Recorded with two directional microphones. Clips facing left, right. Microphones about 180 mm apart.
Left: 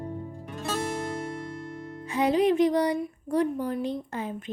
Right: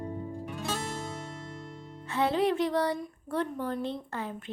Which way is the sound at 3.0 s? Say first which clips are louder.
Left 6 dB; 10° left (ahead or behind).